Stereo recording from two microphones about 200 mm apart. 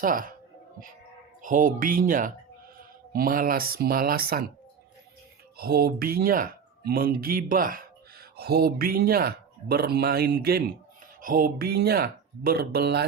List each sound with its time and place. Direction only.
0.0 s speech: 45° right (ahead or behind)
1.4 s speech: 40° right (ahead or behind)
5.5 s speech: 50° right (ahead or behind)